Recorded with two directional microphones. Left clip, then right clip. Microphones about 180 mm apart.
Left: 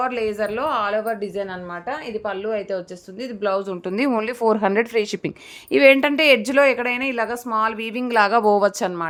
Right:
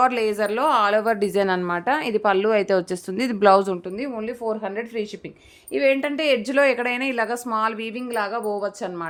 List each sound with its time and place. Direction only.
0.0 s a woman's voice: 20° right (ahead or behind); by 3.6 s 35° right (ahead or behind)
4.1 s speech: 55° left (ahead or behind)
5.7 s speech: 40° left (ahead or behind); by 6.6 s 20° left (ahead or behind)
6.6 s speech: 5° left (ahead or behind)
7.9 s speech: 25° left (ahead or behind); by 8.7 s 40° left (ahead or behind)